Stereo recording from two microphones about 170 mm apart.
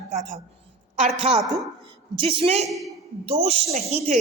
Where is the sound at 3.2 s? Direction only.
35° right (ahead or behind).